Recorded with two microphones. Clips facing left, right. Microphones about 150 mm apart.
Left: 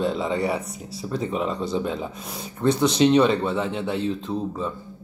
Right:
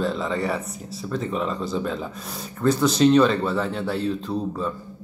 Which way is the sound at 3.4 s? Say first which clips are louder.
Even; 15° left (ahead or behind).